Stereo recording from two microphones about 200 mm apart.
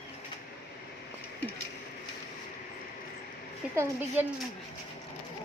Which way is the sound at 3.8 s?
10° right (ahead or behind).